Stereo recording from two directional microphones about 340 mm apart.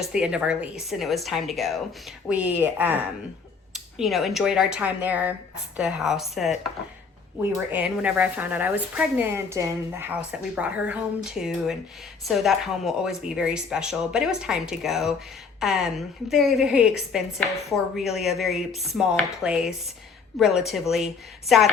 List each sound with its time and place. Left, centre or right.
0.0 s a woman's voice: centre